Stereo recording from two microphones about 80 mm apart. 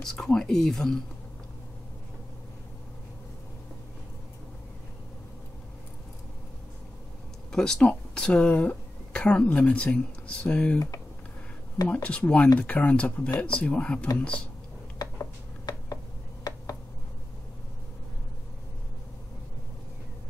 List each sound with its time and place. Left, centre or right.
0.0 s speech: centre
7.5 s speech: centre
11.9 s speech: centre
15.0 s a sound: left